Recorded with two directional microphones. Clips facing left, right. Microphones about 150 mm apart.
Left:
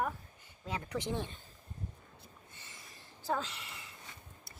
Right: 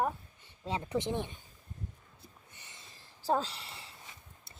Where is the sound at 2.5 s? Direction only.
20° right (ahead or behind).